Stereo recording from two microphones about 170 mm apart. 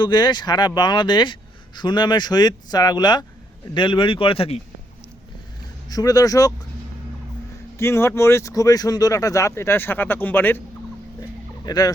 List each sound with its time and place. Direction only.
0.0 s speech: 25° left (ahead or behind)
5.9 s speech: 20° left (ahead or behind)
7.8 s speech: 15° left (ahead or behind)
11.6 s speech: 20° left (ahead or behind)